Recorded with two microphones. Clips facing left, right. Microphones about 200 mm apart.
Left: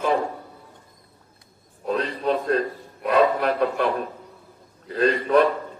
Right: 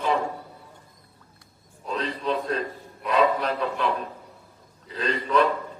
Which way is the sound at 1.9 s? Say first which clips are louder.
Left 4 dB; 55° left (ahead or behind).